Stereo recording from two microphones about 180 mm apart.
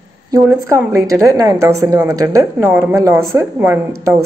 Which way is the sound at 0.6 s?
15° right (ahead or behind).